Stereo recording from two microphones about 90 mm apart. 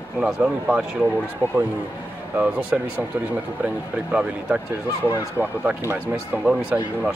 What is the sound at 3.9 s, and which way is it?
Speech, 15° right (ahead or behind).